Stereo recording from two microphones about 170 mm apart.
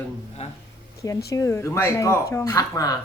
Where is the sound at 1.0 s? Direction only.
20° left (ahead or behind).